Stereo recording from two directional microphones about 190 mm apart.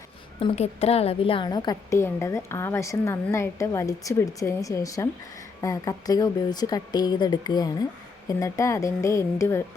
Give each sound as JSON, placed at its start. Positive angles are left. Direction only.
{"t": 0.3, "sound": "a woman's voice", "side_deg": 30}